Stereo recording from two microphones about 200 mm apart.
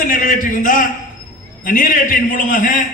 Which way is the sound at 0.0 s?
45° left (ahead or behind).